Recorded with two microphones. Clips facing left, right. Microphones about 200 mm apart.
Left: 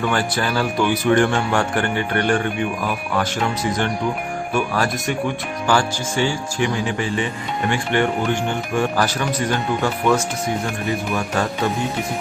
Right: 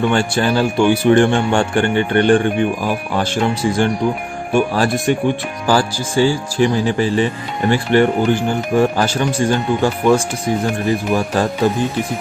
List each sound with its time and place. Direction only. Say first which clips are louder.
0.1 s speech: right 5 dB; 30° right (ahead or behind)